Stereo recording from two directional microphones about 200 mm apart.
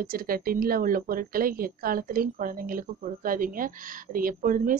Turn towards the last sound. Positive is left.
turn(degrees=-45)  # may be behind; listen again after turning